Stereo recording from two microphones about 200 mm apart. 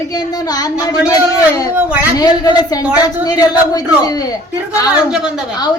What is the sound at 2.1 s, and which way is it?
Speech, 20° left (ahead or behind).